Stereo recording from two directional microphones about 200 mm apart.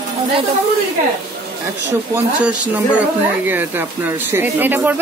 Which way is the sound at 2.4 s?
5° right (ahead or behind).